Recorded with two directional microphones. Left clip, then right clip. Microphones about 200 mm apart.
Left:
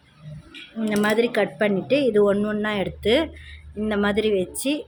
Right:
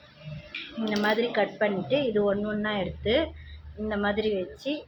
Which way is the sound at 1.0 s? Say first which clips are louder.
Left 5 dB; 60° left (ahead or behind).